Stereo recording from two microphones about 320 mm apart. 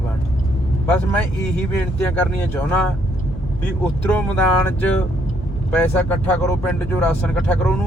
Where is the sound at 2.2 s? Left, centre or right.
Centre.